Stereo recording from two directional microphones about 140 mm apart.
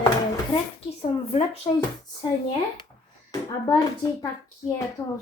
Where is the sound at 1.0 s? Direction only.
50° left (ahead or behind).